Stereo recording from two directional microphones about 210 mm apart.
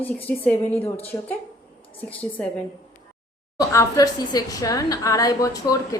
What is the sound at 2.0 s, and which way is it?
Speech, 5° left (ahead or behind).